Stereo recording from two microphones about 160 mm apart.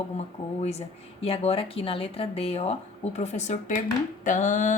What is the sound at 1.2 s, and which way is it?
Speech, 40° left (ahead or behind).